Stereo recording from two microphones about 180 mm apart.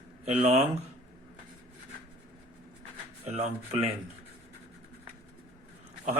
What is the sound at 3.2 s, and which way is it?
Speech, 35° right (ahead or behind).